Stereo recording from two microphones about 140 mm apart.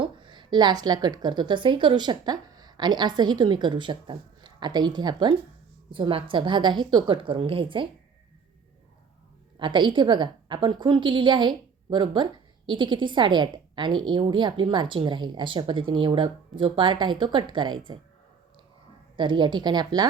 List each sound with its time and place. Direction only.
0.0 s a woman's voice: 35° right (ahead or behind)
9.6 s a woman's voice: 35° right (ahead or behind)
19.1 s a woman's voice: 35° right (ahead or behind)